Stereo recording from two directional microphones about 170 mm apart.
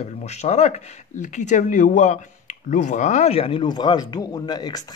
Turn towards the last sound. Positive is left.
turn(degrees=25)  # may be behind; listen again after turning